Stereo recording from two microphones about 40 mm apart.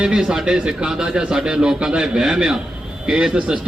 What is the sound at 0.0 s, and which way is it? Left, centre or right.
A man's voice, right.